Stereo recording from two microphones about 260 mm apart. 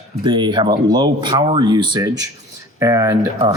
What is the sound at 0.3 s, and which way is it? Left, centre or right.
Speech, centre.